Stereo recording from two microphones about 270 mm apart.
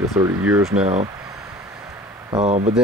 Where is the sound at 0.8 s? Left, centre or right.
Right.